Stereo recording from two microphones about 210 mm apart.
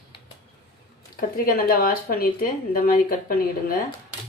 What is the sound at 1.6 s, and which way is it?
Speech, 45° left (ahead or behind).